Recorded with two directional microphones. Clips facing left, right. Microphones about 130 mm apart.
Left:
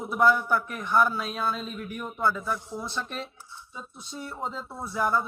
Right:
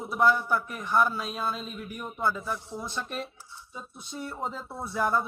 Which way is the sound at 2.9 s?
40° right (ahead or behind).